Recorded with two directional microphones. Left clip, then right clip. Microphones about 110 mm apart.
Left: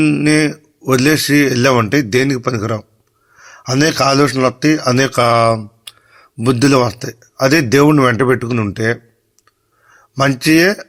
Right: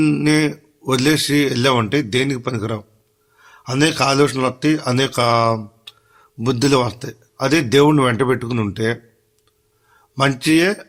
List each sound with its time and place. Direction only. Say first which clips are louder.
0.0 s a man's voice: left 4 dB; 20° left (ahead or behind)
10.2 s a man's voice: left 4 dB; 30° left (ahead or behind)